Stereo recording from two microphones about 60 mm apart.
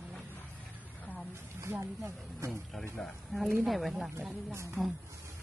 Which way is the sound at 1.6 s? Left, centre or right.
Right.